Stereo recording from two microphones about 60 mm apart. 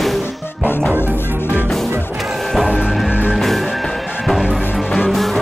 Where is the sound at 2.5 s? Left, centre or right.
Centre.